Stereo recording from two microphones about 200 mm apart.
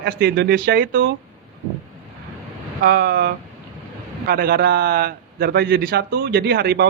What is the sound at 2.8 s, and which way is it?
A man's voice, 50° right (ahead or behind).